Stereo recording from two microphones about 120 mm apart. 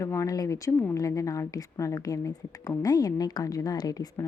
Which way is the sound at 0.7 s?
15° left (ahead or behind).